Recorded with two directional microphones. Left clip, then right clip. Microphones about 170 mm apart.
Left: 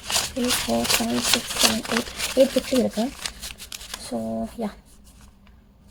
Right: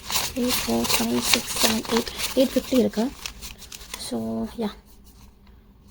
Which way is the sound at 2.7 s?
10° right (ahead or behind).